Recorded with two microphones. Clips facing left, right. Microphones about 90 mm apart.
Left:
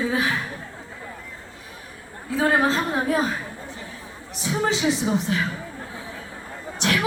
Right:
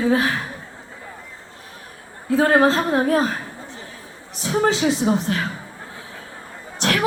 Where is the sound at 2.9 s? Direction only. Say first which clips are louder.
Right 4 dB; 45° right (ahead or behind).